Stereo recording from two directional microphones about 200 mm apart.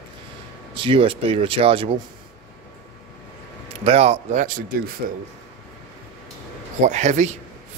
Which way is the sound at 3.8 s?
30° right (ahead or behind).